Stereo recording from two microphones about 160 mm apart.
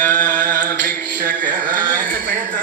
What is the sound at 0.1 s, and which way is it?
Carnatic music, 55° right (ahead or behind).